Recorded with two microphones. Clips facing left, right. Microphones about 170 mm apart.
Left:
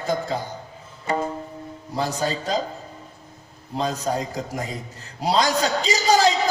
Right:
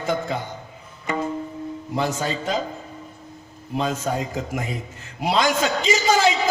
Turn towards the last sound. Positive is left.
turn(degrees=35)  # may be behind; listen again after turning